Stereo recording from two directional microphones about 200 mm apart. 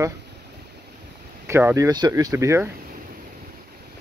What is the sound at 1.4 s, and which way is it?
Speech, 15° right (ahead or behind).